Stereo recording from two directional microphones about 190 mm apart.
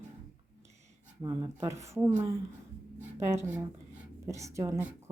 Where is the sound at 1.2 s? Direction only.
20° right (ahead or behind).